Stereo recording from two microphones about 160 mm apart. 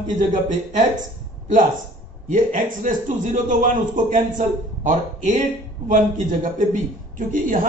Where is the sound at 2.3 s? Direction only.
55° right (ahead or behind).